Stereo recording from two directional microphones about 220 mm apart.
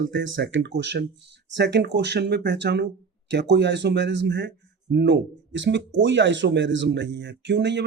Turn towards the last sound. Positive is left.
turn(degrees=-50)  # may be behind; listen again after turning